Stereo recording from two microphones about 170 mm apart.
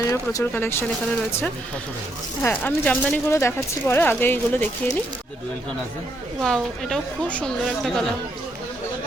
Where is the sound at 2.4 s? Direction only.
10° left (ahead or behind).